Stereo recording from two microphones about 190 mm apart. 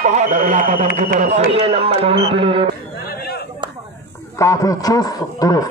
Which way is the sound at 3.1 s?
55° left (ahead or behind).